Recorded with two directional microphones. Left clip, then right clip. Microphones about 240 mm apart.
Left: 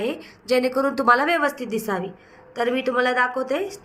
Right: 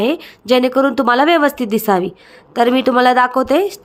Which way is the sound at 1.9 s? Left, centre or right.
Right.